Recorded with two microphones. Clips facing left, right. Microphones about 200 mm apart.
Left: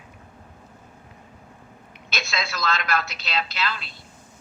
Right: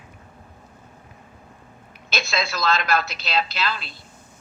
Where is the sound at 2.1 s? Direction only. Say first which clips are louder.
Right 4 dB; 30° right (ahead or behind).